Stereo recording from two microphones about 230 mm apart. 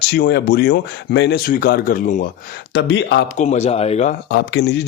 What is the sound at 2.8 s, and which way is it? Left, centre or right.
Speech, left.